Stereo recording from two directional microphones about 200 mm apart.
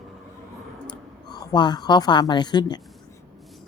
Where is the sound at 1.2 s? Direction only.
20° left (ahead or behind).